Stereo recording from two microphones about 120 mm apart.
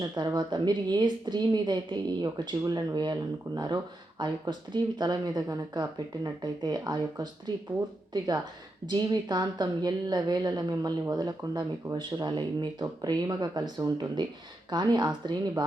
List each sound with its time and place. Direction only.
0.0 s a woman's voice: 35° right (ahead or behind)
8.9 s a woman's voice: 35° right (ahead or behind)